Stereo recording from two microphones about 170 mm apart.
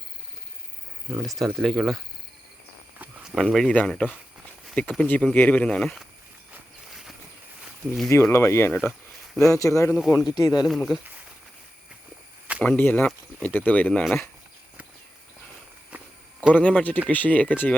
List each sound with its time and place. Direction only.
1.1 s speech: centre (ahead or behind)
3.3 s speech: centre (ahead or behind)
8.1 s speech: 15° left (ahead or behind)
8.8 s a sound: centre (ahead or behind)
9.4 s speech: 20° left (ahead or behind)
10.7 s speech: centre (ahead or behind)
12.6 s speech: 10° left (ahead or behind)
14.0 s speech: centre (ahead or behind)
15.9 s a sound: 10° right (ahead or behind)
16.6 s speech: 10° left (ahead or behind)